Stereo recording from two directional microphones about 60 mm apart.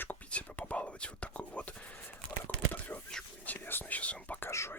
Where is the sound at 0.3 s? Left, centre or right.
Left.